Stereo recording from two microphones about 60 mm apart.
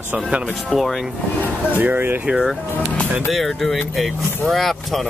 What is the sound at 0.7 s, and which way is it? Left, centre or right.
Speech, centre.